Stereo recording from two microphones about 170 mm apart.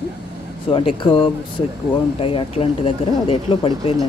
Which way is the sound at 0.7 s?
30° left (ahead or behind).